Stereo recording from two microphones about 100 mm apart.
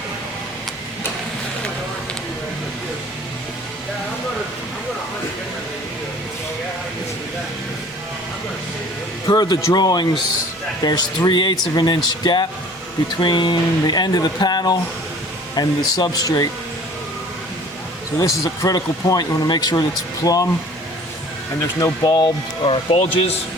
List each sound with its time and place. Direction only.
9.2 s speech: 40° left (ahead or behind)
18.2 s speech: 35° left (ahead or behind)
22.0 s speech: 45° left (ahead or behind); by 23.3 s 75° left (ahead or behind)